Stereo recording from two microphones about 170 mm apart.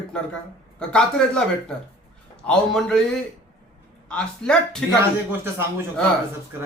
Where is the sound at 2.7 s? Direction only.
5° left (ahead or behind).